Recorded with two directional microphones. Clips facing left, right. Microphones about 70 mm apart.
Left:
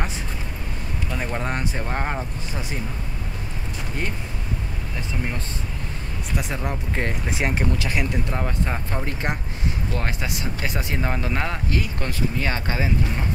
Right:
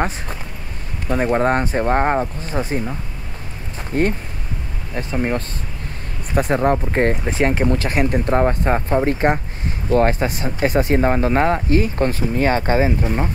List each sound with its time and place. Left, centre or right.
1.0 s speech: right
3.9 s speech: right